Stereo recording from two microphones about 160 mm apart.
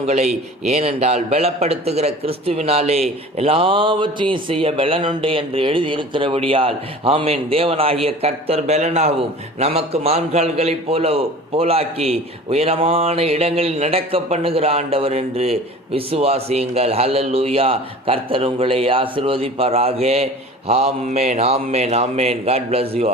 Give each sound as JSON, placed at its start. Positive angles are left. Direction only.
{"t": 0.6, "sound": "a man's voice", "side_deg": -40}